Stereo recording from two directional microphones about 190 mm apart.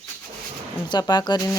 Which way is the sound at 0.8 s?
20° left (ahead or behind).